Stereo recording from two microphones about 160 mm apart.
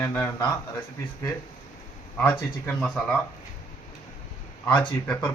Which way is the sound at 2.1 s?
15° left (ahead or behind).